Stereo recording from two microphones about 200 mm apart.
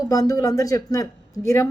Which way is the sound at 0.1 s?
15° left (ahead or behind).